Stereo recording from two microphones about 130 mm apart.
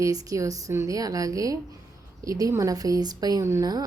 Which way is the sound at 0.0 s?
25° right (ahead or behind).